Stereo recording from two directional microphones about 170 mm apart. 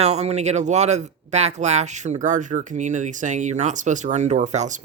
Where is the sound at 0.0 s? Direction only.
40° right (ahead or behind).